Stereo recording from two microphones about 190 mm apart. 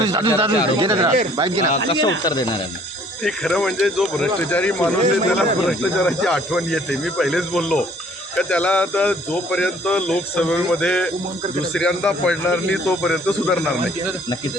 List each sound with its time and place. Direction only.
0.0 s speech: 20° right (ahead or behind)
1.4 s speech: 30° right (ahead or behind)
1.9 s speech: 20° left (ahead or behind)
3.2 s speech: 5° left (ahead or behind)